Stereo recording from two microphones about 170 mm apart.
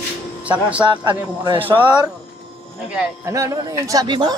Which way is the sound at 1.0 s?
25° right (ahead or behind).